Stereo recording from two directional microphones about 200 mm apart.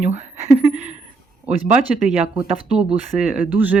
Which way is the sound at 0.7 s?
35° right (ahead or behind).